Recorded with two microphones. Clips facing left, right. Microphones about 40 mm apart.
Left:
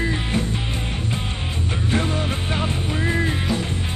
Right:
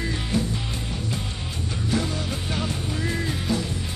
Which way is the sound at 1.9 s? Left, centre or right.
Left.